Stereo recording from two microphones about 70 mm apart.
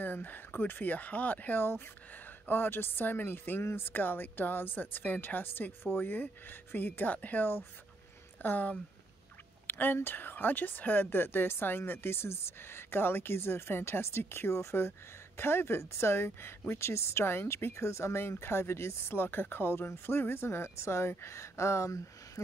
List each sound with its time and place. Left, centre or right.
0.0 s speech: left